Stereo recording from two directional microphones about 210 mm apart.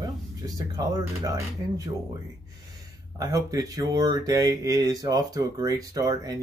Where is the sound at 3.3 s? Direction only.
15° right (ahead or behind).